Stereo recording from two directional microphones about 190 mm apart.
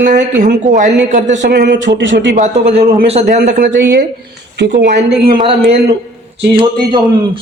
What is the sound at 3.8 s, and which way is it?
Speech, 50° right (ahead or behind).